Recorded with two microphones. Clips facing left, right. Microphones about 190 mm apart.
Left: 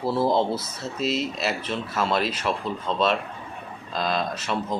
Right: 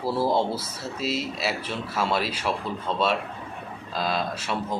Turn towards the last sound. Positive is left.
turn(degrees=-5)  # may be behind; listen again after turning